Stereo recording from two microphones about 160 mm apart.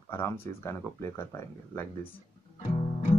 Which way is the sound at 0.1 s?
15° left (ahead or behind).